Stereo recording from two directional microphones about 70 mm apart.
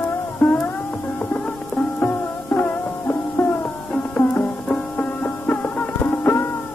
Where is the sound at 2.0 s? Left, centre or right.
Left.